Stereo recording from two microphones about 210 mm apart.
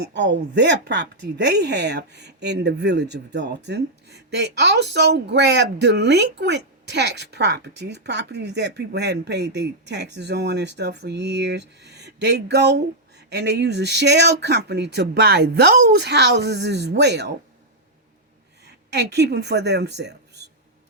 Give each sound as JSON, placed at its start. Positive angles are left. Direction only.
{"t": 0.0, "sound": "speech", "side_deg": -55}
{"t": 18.6, "sound": "speech", "side_deg": -55}